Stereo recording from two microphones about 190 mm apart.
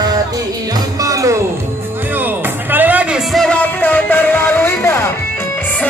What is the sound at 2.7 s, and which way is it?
Music, 10° right (ahead or behind).